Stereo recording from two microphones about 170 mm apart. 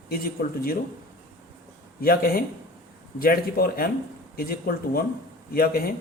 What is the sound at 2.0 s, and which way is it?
Speech, 60° left (ahead or behind).